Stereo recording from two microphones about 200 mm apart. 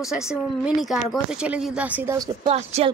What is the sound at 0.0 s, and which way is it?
Speech, centre (ahead or behind).